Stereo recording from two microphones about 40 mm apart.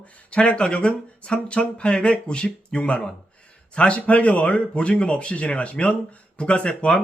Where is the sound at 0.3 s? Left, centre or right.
Left.